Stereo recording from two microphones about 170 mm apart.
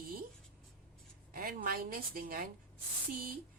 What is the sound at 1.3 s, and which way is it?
A woman's voice, 60° right (ahead or behind).